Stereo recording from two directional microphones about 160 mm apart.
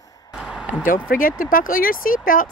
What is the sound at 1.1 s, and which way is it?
Speech, 60° left (ahead or behind).